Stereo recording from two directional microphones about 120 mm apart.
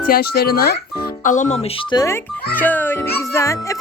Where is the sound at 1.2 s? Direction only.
90° left; by 1.7 s 70° left (ahead or behind).